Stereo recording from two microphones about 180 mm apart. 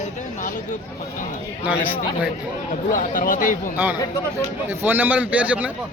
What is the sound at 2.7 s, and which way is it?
Speech, 50° left (ahead or behind).